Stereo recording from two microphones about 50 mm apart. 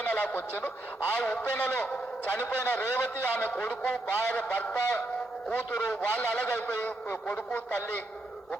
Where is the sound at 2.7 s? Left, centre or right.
Left.